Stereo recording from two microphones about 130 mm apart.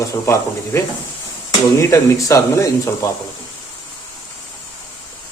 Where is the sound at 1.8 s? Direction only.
25° left (ahead or behind).